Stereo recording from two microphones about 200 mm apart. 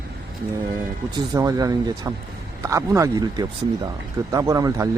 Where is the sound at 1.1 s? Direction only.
20° right (ahead or behind).